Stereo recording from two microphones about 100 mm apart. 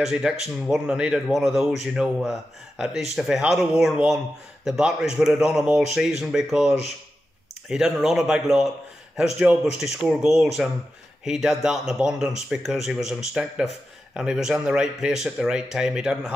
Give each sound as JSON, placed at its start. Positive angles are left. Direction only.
{"t": 0.0, "sound": "speech", "side_deg": -5}